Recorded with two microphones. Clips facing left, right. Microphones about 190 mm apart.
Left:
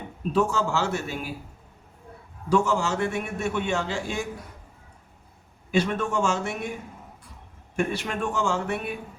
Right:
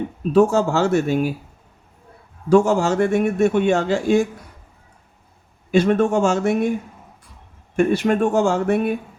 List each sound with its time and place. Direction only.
0.3 s a man's voice: 45° right (ahead or behind)
2.5 s a man's voice: 45° right (ahead or behind)
5.7 s a man's voice: 50° right (ahead or behind)
7.9 s a man's voice: 45° right (ahead or behind)